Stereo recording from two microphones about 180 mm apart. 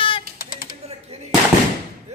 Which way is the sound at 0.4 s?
50° left (ahead or behind).